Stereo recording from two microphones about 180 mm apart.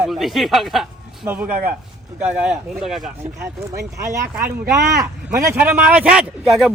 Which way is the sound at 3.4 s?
15° right (ahead or behind).